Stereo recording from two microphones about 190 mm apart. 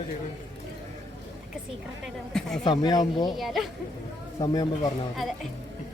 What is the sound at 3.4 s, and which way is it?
Speech, centre (ahead or behind).